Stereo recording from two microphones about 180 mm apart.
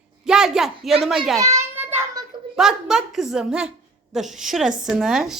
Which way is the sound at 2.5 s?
5° right (ahead or behind).